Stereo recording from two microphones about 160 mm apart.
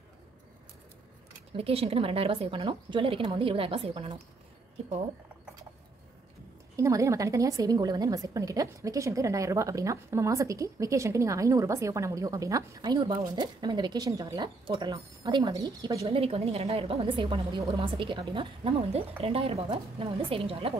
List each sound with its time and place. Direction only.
1.6 s a woman's voice: 35° right (ahead or behind)
6.8 s a woman's voice: 20° right (ahead or behind)
16.1 s a woman's voice: 35° right (ahead or behind)